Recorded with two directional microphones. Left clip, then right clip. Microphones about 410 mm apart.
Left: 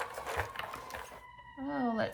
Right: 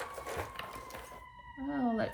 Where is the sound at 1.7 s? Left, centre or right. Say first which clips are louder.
Even; centre.